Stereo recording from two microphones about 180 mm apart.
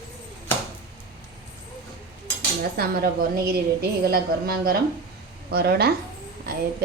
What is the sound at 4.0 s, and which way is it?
A woman's voice, 60° right (ahead or behind).